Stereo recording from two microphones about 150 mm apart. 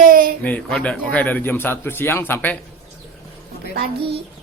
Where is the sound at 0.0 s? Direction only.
70° right (ahead or behind).